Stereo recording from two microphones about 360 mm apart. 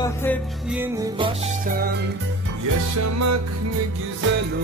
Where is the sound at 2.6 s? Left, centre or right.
Right.